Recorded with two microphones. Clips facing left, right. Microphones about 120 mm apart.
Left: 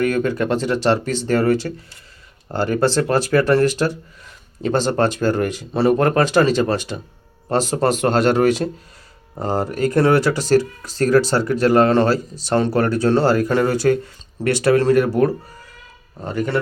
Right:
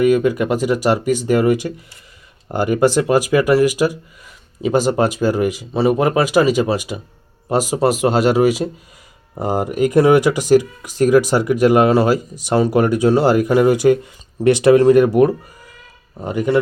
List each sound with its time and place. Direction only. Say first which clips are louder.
0.0 s speech: right 4 dB; 10° right (ahead or behind)